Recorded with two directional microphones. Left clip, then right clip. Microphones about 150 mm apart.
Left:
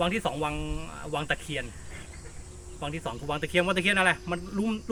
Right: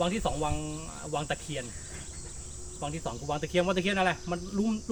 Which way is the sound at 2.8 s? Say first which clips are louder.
Left 2 dB; 5° left (ahead or behind).